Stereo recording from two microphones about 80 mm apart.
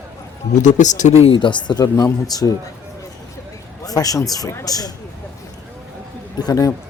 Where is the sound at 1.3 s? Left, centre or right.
Left.